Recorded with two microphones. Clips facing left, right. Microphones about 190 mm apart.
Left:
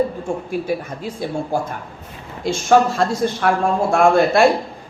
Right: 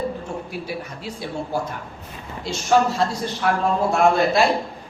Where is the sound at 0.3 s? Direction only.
50° left (ahead or behind).